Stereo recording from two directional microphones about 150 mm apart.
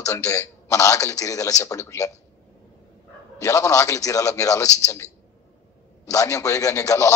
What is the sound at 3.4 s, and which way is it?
A man's voice, 20° left (ahead or behind).